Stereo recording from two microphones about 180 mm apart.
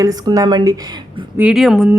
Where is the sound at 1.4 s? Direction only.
5° right (ahead or behind).